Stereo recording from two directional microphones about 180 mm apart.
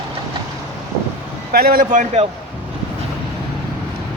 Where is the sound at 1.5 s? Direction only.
55° right (ahead or behind).